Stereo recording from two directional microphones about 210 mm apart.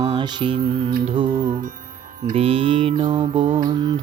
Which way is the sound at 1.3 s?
40° right (ahead or behind).